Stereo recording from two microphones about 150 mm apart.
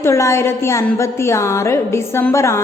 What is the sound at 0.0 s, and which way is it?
A woman's voice, 20° left (ahead or behind).